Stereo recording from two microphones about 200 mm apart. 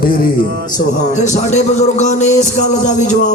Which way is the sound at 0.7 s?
35° left (ahead or behind).